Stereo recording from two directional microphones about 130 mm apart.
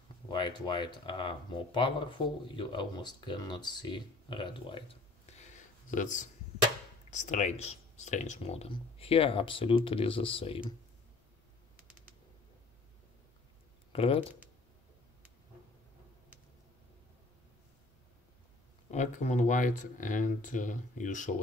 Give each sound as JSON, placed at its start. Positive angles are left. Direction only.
{"t": 0.3, "sound": "speech", "side_deg": 35}
{"t": 5.4, "sound": "a sound", "side_deg": 70}
{"t": 7.1, "sound": "speech", "side_deg": 70}
{"t": 13.9, "sound": "speech", "side_deg": 45}
{"t": 18.9, "sound": "speech", "side_deg": 65}